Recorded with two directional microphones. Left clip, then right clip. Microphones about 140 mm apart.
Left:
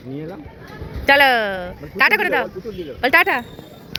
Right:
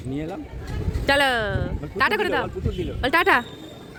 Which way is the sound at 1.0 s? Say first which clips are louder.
Left 6 dB; 5° left (ahead or behind).